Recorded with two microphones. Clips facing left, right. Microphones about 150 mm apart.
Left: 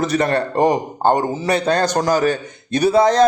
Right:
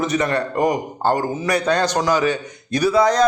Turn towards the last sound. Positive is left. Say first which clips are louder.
# left 2 dB
turn(degrees=25)  # may be behind; listen again after turning